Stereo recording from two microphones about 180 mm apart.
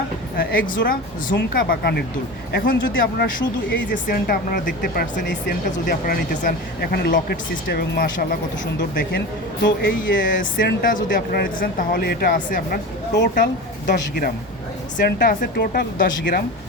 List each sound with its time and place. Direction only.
0.3 s speech: 55° left (ahead or behind)
9.6 s speech: 70° left (ahead or behind)
10.2 s speech: 50° left (ahead or behind)